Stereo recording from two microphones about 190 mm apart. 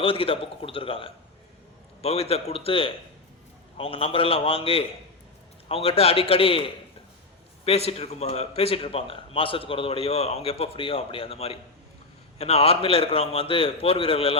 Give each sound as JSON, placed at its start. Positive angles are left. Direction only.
{"t": 0.0, "sound": "a man's voice", "side_deg": 30}